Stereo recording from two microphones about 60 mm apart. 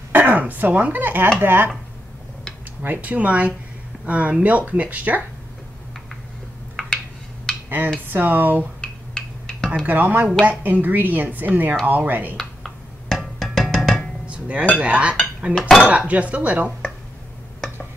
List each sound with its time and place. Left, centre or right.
0.1 s speech: right
2.8 s a woman's voice: right
6.8 s a sound: centre
8.1 s speech: right
8.8 s a sound: centre
9.8 s a woman's voice: right
12.4 s music: centre
14.2 s dishes: right
14.8 s a woman's voice: right